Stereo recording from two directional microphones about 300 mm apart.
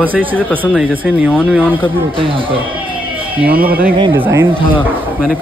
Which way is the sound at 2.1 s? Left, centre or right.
Centre.